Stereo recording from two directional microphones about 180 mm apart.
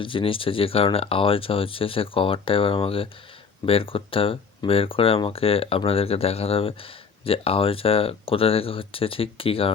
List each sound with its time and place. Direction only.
0.0 s speech: 30° left (ahead or behind)